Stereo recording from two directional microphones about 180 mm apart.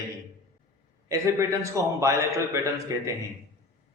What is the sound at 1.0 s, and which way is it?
A man's voice, 15° right (ahead or behind).